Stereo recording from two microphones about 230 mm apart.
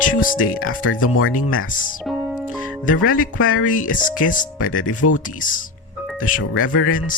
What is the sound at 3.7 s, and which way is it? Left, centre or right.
Speech, left.